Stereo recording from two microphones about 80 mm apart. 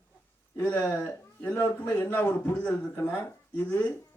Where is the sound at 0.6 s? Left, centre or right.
Centre.